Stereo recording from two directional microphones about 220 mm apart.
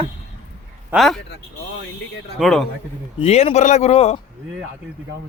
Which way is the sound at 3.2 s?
25° left (ahead or behind).